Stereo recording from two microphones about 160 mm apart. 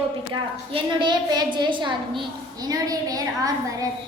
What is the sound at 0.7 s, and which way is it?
A woman's voice, 30° right (ahead or behind).